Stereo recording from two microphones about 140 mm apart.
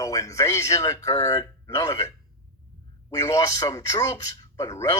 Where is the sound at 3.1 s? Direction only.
25° left (ahead or behind).